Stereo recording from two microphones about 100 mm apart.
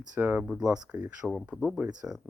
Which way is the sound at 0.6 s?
10° right (ahead or behind).